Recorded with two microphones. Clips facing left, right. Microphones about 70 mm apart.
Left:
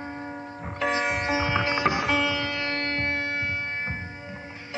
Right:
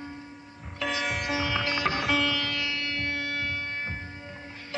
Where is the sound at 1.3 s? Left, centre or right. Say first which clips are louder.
Left 4 dB; left.